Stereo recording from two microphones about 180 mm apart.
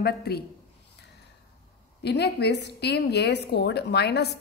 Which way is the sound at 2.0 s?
65° left (ahead or behind).